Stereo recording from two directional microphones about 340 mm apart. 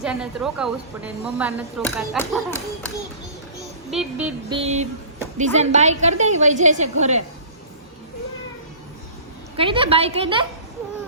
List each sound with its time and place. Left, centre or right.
0.0 s speech: centre
4.5 s a woman's voice: centre
9.6 s a woman's voice: centre